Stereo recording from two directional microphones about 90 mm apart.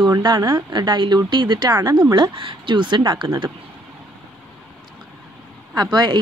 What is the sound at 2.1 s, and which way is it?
Speech, 70° right (ahead or behind).